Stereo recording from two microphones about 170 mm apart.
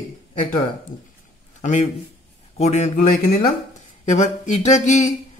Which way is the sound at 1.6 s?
45° left (ahead or behind).